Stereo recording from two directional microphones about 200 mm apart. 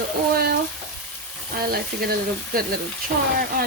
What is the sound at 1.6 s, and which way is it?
Speech, 50° right (ahead or behind).